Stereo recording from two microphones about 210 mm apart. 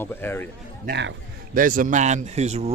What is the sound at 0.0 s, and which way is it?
Speech, 10° left (ahead or behind).